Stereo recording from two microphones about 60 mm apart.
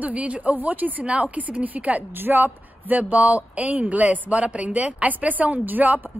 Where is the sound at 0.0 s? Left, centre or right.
Right.